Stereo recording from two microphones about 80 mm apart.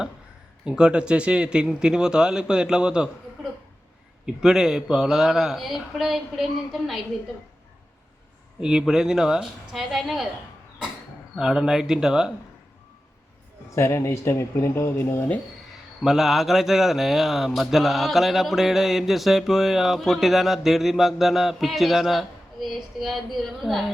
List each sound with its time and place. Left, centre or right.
0.6 s speech: centre
4.4 s speech: centre
8.6 s speech: centre
11.3 s speech: centre
13.7 s speech: left
16.0 s speech: centre